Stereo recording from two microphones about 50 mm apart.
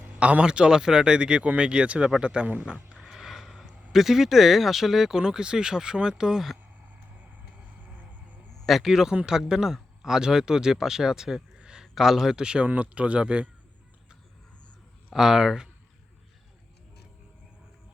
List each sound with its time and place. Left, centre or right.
0.0 s a sound: right
0.4 s speech: centre
2.9 s a sound: centre
3.9 s speech: centre
7.8 s vehicle: right
8.6 s speech: centre
11.5 s a sound: centre
11.9 s speech: centre
12.6 s speech: right
15.1 s speech: centre